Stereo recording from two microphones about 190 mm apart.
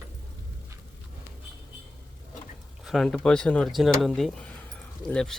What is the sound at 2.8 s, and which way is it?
Speech, centre (ahead or behind).